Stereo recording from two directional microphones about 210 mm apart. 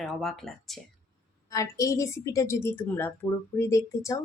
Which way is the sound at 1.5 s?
15° left (ahead or behind).